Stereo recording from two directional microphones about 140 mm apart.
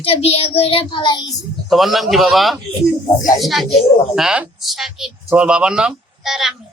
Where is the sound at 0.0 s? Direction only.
45° left (ahead or behind).